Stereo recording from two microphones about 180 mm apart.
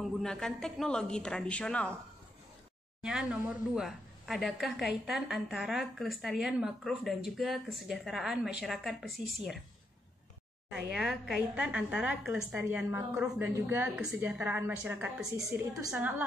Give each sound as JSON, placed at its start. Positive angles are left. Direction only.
{"t": 0.0, "sound": "a woman's voice", "side_deg": 0}
{"t": 3.0, "sound": "a woman's voice", "side_deg": -5}
{"t": 10.9, "sound": "a woman's voice", "side_deg": 0}